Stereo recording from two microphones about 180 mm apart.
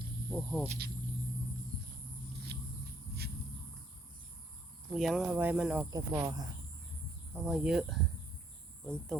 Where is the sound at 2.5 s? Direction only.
70° right (ahead or behind).